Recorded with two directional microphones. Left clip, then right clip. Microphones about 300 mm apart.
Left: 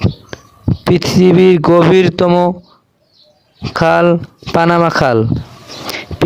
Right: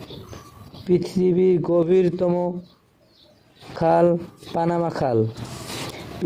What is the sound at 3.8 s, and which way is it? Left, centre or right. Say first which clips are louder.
Speech: left 7 dB; left.